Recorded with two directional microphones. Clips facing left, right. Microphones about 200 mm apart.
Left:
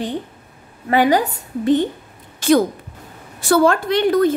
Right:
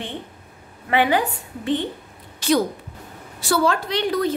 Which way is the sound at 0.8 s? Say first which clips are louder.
Left 4 dB; 40° left (ahead or behind).